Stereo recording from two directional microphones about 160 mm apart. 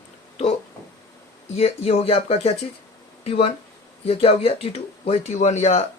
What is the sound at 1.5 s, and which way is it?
Speech, 40° left (ahead or behind).